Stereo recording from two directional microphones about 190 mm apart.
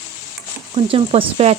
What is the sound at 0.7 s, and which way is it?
Speech, 30° right (ahead or behind).